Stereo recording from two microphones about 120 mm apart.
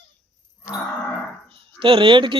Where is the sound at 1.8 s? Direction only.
50° right (ahead or behind).